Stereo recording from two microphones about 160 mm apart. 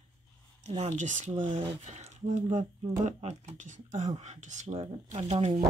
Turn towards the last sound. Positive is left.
turn(degrees=-40)  # may be behind; listen again after turning